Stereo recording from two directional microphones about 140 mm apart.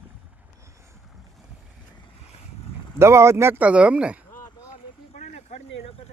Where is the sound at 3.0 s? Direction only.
20° right (ahead or behind).